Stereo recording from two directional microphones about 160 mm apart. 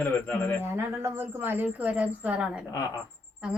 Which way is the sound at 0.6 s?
15° right (ahead or behind).